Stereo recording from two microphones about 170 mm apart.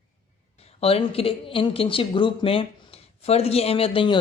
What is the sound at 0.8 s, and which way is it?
Speech, 35° left (ahead or behind).